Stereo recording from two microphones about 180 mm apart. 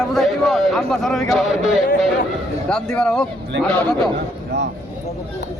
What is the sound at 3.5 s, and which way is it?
Speech, 75° right (ahead or behind).